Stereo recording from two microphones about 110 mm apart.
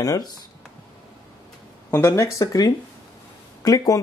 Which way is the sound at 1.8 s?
20° left (ahead or behind).